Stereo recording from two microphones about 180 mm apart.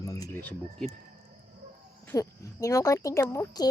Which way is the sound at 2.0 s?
15° left (ahead or behind).